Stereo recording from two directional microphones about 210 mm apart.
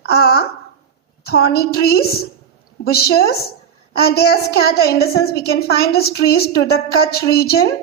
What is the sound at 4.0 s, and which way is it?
A woman's voice, 50° left (ahead or behind).